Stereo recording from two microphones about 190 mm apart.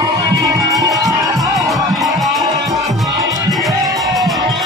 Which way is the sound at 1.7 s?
Centre (ahead or behind).